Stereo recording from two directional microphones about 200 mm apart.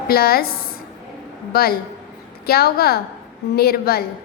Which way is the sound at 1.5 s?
50° left (ahead or behind).